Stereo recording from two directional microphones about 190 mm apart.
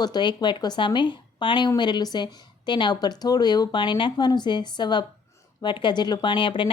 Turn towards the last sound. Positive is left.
turn(degrees=25)  # may be behind; listen again after turning